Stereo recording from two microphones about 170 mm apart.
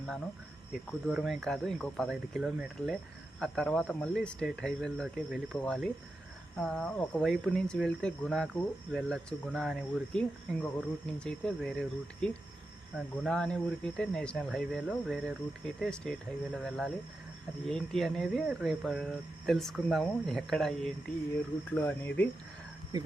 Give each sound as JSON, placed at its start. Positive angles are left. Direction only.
{"t": 0.9, "sound": "speech", "side_deg": 0}
{"t": 22.9, "sound": "speech", "side_deg": -20}